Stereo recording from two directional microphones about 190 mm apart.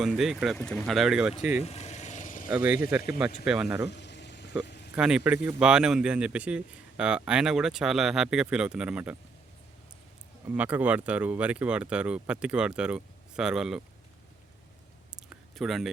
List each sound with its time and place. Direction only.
0.0 s speech: centre (ahead or behind)
1.6 s vehicle: 35° left (ahead or behind)
2.5 s speech: 5° right (ahead or behind)
3.8 s a sound: 65° left (ahead or behind)
4.9 s speech: 5° right (ahead or behind)
10.5 s speech: 10° right (ahead or behind)
15.1 s a sound: centre (ahead or behind)